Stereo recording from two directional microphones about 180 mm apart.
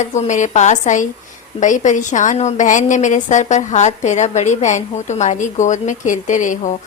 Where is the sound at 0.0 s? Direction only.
40° left (ahead or behind).